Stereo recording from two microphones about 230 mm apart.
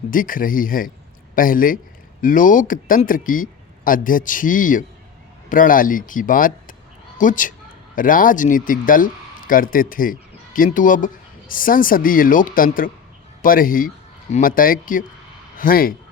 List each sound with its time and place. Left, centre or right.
0.1 s speech: left